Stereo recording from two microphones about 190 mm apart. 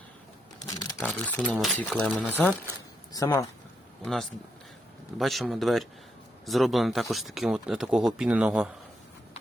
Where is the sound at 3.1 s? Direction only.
15° left (ahead or behind).